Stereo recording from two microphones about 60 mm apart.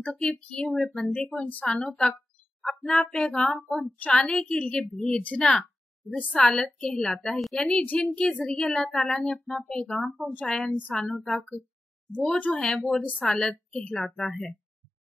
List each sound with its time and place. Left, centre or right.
0.0 s a woman's voice: centre
0.7 s speech: centre
1.1 s a woman's voice: centre
1.8 s a woman's voice: centre
5.2 s a woman's voice: left; by 7.5 s centre
7.5 s a woman's voice: centre
8.5 s a woman's voice: centre
11.1 s speech: centre
12.4 s a woman's voice: centre